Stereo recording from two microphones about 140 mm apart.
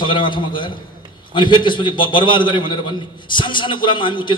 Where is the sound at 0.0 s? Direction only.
35° left (ahead or behind).